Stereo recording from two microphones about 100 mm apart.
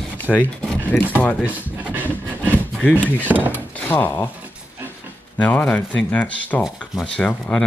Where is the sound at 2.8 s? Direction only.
15° left (ahead or behind).